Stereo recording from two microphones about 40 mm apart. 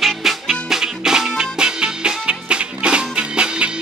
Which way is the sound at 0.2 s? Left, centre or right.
Centre.